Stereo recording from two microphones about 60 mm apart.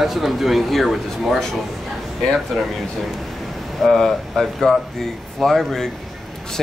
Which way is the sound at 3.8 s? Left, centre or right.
Centre.